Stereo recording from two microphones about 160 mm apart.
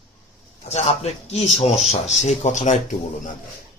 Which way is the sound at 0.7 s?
45° left (ahead or behind).